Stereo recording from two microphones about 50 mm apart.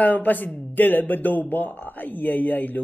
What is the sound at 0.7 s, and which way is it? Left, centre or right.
Speech, left.